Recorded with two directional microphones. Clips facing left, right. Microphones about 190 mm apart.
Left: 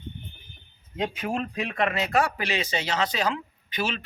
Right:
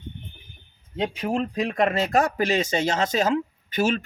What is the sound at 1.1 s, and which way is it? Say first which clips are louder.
Speech: right 4 dB; 30° right (ahead or behind).